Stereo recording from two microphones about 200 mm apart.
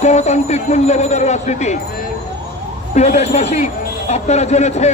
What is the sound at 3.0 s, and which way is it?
Speech, 35° left (ahead or behind).